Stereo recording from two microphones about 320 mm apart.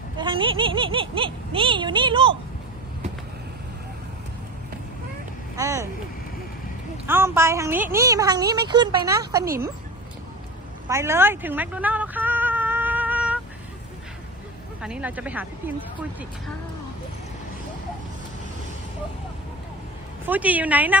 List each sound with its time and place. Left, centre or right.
0.2 s a woman's voice: centre
5.5 s a woman's voice: centre
6.9 s a woman's voice: centre
10.8 s a sound: centre
14.8 s speech: centre
20.2 s speech: centre